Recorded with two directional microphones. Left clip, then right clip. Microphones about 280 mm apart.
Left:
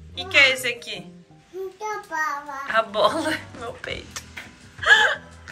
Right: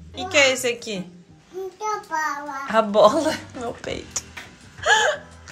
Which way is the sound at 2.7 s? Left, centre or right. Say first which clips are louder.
Right 5 dB; centre.